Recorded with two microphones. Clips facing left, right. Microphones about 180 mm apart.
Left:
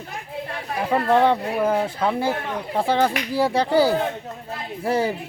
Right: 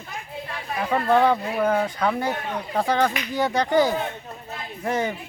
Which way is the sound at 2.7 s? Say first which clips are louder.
Left 2 dB; 30° left (ahead or behind).